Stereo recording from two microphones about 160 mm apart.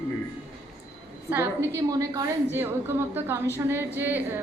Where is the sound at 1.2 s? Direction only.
10° right (ahead or behind).